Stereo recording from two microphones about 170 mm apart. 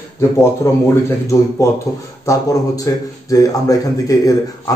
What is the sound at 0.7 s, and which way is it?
A man's voice, 15° left (ahead or behind).